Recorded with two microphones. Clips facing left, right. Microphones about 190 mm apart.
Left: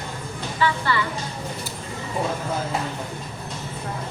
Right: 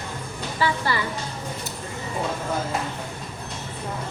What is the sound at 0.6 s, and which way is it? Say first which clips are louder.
Speech: left 1 dB; 40° right (ahead or behind).